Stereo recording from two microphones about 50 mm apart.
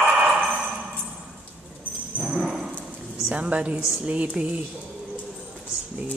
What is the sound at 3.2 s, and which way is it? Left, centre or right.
A woman's voice, right.